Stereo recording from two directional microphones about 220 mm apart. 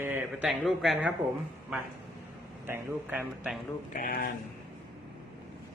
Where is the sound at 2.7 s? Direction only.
10° right (ahead or behind).